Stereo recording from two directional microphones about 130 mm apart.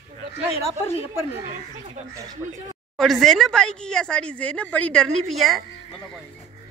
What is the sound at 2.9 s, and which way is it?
Speech, centre (ahead or behind).